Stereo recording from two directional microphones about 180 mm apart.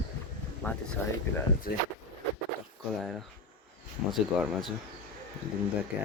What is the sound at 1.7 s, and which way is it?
Speech, 55° left (ahead or behind).